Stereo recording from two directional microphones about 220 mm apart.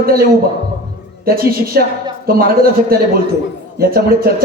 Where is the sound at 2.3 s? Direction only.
40° right (ahead or behind).